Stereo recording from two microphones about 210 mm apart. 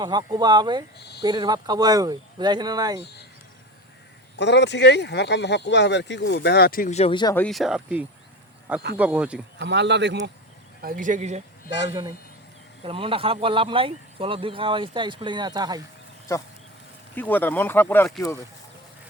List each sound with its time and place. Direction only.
0.0 s speech: 20° right (ahead or behind)
4.4 s speech: 55° left (ahead or behind); by 7.3 s 20° left (ahead or behind)
7.3 s speech: centre (ahead or behind)
9.6 s a man's voice: 55° right (ahead or behind)
10.8 s speech: 40° right (ahead or behind)
11.8 s speech: 20° right (ahead or behind)
17.2 s speech: 10° left (ahead or behind)